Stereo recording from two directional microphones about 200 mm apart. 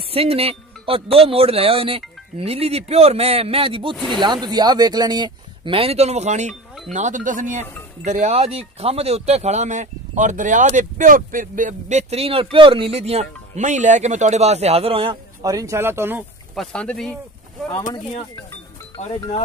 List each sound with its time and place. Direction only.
0.1 s speech: 30° right (ahead or behind)
3.9 s speech: centre (ahead or behind)
4.2 s speech: 20° right (ahead or behind)
16.5 s speech: 5° left (ahead or behind)